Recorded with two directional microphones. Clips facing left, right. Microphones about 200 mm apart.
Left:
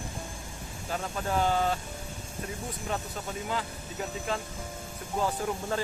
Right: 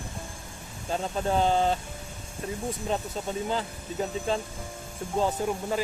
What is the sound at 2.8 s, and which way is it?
Speech, 25° right (ahead or behind).